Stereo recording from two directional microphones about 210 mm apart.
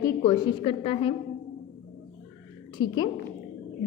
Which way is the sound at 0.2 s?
25° left (ahead or behind).